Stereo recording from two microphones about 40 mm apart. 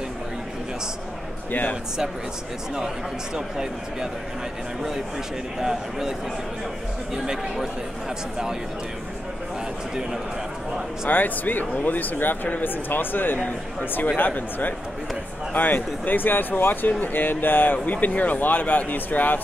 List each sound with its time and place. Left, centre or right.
3.3 s speech: centre
5.6 s speech: centre
11.1 s speech: left
17.8 s speech: left